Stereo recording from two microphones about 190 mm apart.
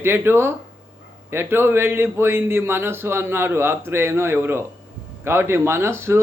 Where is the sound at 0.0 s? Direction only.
10° right (ahead or behind).